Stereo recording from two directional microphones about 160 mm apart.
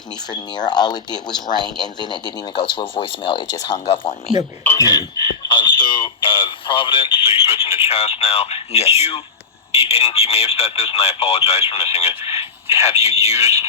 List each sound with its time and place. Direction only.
0.3 s speech: 25° left (ahead or behind)
4.6 s a sound: 15° left (ahead or behind); by 9.2 s 40° left (ahead or behind)
9.7 s speech: 40° left (ahead or behind)